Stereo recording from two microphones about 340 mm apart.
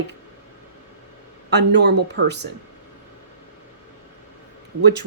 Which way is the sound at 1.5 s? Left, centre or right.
Right.